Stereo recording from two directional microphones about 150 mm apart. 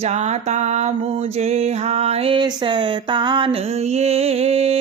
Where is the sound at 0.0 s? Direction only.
50° right (ahead or behind).